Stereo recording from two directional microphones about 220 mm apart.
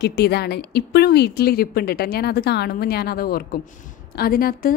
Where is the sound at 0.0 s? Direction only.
45° left (ahead or behind).